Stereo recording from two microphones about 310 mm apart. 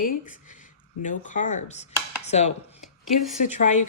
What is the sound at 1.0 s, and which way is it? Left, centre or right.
Speech, left.